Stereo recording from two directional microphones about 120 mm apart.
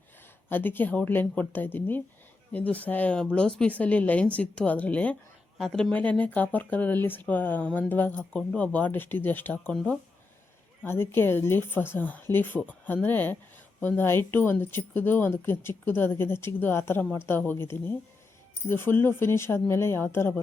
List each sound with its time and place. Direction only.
0.5 s speech: 15° left (ahead or behind)